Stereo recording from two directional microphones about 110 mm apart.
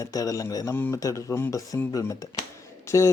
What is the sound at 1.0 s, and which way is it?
A man's voice, 30° left (ahead or behind).